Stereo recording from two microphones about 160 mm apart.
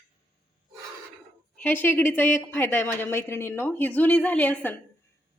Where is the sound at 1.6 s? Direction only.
10° left (ahead or behind).